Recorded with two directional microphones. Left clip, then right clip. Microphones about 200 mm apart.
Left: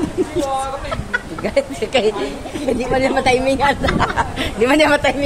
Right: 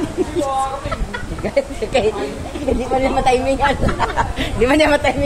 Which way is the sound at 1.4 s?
15° left (ahead or behind).